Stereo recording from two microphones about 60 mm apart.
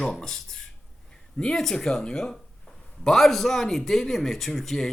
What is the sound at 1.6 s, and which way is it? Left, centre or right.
A man's voice, centre.